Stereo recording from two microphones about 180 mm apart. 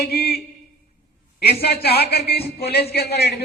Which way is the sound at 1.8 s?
60° left (ahead or behind).